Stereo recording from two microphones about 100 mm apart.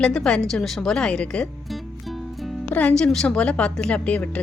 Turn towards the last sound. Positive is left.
turn(degrees=15)  # may be behind; listen again after turning